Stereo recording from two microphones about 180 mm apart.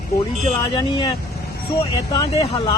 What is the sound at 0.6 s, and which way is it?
Speech, 25° left (ahead or behind).